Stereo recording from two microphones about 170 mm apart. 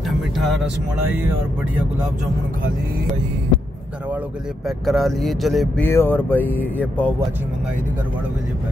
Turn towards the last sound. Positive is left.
turn(degrees=10)  # may be behind; listen again after turning